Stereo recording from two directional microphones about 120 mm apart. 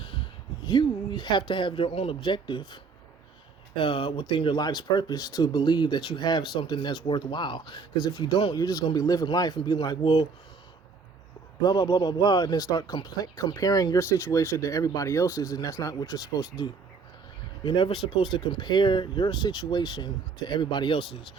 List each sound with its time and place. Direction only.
0.0 s speech: 45° left (ahead or behind)
3.8 s speech: 45° left (ahead or behind)
11.6 s speech: 35° left (ahead or behind)